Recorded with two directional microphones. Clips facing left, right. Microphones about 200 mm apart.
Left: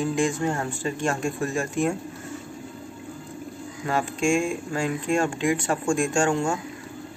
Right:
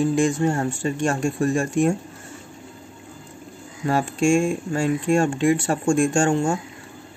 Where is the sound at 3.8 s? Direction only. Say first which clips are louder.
Right 4 dB; 40° right (ahead or behind).